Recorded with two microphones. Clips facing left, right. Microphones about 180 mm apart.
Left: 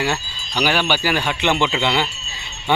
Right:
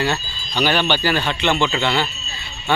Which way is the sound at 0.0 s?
10° left (ahead or behind).